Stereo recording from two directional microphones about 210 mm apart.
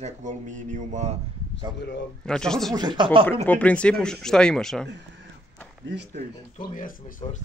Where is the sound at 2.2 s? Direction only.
5° left (ahead or behind).